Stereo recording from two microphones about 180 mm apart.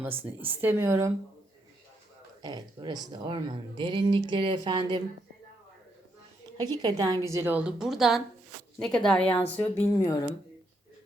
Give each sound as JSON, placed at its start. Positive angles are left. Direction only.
{"t": 0.0, "sound": "speech", "side_deg": -10}
{"t": 2.4, "sound": "speech", "side_deg": -25}
{"t": 6.6, "sound": "a woman's voice", "side_deg": -20}